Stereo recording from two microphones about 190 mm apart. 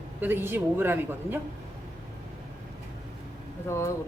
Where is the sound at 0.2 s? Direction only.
10° right (ahead or behind).